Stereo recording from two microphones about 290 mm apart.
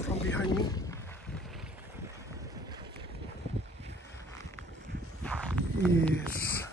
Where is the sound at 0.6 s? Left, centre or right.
Centre.